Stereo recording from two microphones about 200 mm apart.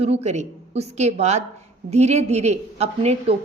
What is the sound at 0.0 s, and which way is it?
A woman's voice, 30° right (ahead or behind).